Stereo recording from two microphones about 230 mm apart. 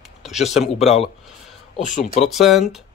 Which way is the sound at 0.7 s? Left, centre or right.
Left.